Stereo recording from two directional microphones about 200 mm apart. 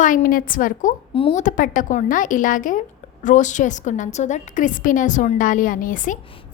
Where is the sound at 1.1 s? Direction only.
30° left (ahead or behind).